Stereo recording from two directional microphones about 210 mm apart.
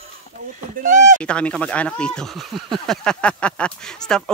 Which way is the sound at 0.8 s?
35° right (ahead or behind).